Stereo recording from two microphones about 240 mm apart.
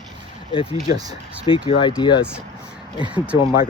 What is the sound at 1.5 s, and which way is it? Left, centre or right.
Speech, left.